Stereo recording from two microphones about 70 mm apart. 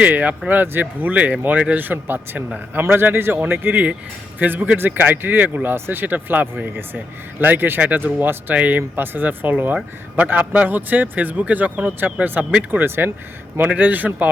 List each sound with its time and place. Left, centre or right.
0.0 s a man's voice: right
12.5 s speech: centre
13.0 s speech: right